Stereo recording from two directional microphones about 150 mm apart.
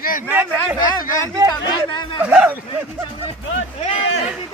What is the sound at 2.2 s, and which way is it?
Speech, 10° right (ahead or behind).